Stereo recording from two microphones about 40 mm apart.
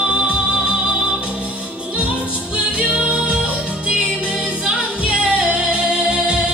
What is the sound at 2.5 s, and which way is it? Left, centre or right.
Music, right.